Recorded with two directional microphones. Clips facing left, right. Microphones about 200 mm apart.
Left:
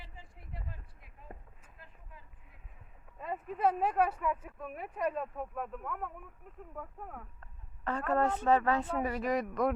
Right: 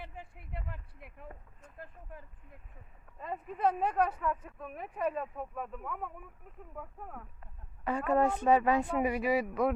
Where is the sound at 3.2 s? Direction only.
Centre (ahead or behind).